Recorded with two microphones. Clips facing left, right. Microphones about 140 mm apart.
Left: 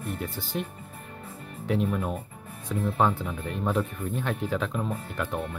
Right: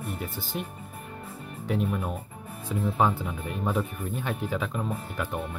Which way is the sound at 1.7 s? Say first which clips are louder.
Left 2 dB; centre (ahead or behind).